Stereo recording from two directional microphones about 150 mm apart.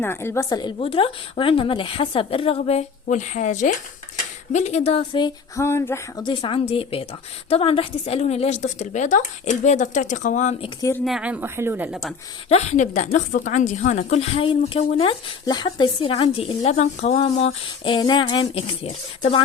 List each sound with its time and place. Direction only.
0.0 s a sound: 15° left (ahead or behind)
0.6 s a woman's voice: 35° left (ahead or behind)
5.5 s a sound: 15° left (ahead or behind)
6.2 s a woman's voice: 35° left (ahead or behind); by 10.5 s 55° left (ahead or behind)
10.8 s speech: 20° left (ahead or behind)
11.0 s speech: 5° right (ahead or behind)
12.5 s a woman's voice: 50° left (ahead or behind)